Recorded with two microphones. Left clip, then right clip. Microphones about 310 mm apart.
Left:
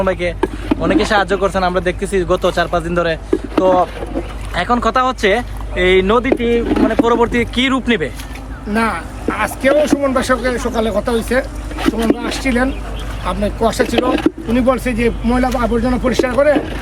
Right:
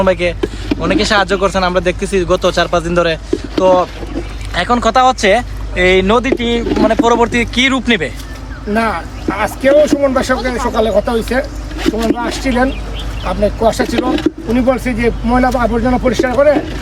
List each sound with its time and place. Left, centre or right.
0.0 s speech: centre
11.8 s speech: centre
12.4 s speech: centre
13.9 s speech: centre
14.5 s speech: centre